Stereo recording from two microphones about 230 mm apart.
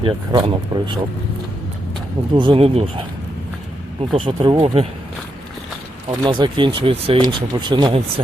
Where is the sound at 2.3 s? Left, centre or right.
Right.